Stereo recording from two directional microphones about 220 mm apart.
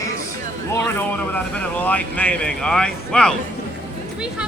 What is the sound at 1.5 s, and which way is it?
Speech, 5° left (ahead or behind).